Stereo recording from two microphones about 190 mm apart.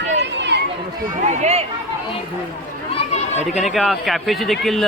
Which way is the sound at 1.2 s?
35° right (ahead or behind).